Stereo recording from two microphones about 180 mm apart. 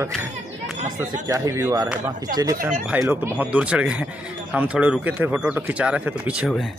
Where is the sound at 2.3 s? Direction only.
20° right (ahead or behind); by 6.7 s 5° right (ahead or behind).